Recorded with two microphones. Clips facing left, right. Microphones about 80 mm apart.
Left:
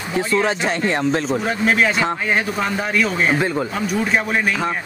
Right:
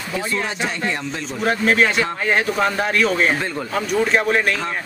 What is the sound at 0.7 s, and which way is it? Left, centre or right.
Speech, left.